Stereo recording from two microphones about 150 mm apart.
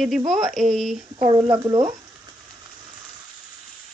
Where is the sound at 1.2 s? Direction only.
25° right (ahead or behind).